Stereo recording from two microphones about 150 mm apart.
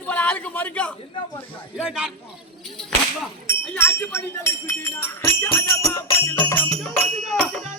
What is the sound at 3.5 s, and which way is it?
Speech, 15° left (ahead or behind).